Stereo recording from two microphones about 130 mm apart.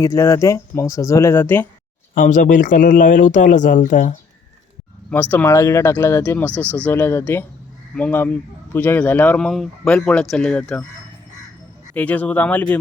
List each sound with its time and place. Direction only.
0.0 s speech: 25° left (ahead or behind)
2.1 s speech: 85° left
5.1 s speech: 15° left (ahead or behind)
11.9 s speech: 10° left (ahead or behind)